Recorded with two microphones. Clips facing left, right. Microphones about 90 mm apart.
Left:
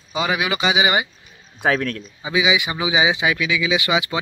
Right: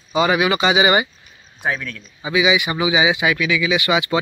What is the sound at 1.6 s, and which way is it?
Speech, 90° left.